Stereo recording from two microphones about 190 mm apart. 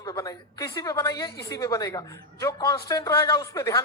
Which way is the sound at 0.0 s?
15° left (ahead or behind).